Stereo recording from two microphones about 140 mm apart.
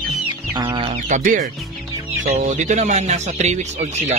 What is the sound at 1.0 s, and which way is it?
Speech, 65° right (ahead or behind).